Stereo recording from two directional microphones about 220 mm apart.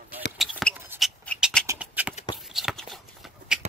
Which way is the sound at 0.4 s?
Centre (ahead or behind).